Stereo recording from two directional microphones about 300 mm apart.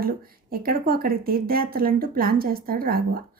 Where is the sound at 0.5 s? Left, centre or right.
Right.